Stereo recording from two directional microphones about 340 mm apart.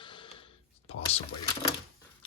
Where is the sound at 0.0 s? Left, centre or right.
Centre.